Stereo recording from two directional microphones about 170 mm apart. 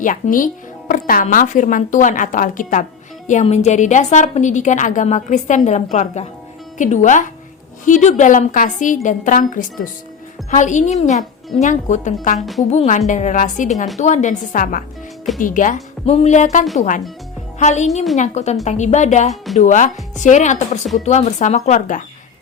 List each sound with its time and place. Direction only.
0.0 s a woman's voice: 50° left (ahead or behind)